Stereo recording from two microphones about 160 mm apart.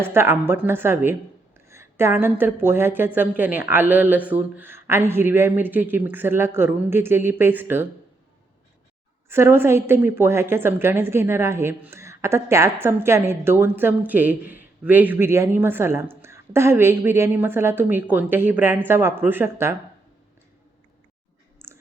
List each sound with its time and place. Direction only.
0.0 s a woman's voice: 15° right (ahead or behind)
9.3 s a woman's voice: 15° right (ahead or behind)
21.6 s clicking: 15° right (ahead or behind)